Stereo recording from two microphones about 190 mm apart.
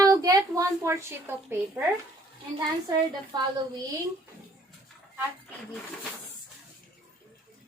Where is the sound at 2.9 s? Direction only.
20° right (ahead or behind).